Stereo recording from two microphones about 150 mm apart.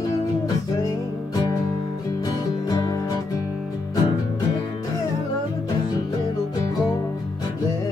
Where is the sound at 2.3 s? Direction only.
25° left (ahead or behind).